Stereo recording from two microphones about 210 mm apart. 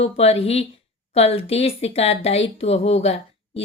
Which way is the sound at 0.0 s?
30° left (ahead or behind).